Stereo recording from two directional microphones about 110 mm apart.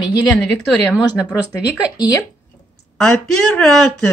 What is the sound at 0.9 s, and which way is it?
Speech, 10° right (ahead or behind).